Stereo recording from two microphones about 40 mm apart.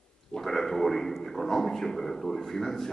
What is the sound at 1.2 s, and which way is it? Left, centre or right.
Speech, centre.